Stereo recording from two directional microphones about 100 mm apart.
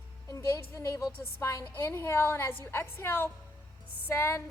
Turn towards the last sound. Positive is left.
turn(degrees=25)  # may be behind; listen again after turning